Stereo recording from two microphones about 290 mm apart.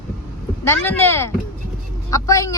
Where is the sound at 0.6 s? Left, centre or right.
Centre.